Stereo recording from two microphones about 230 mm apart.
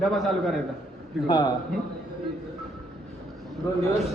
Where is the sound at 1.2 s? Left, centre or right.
Centre.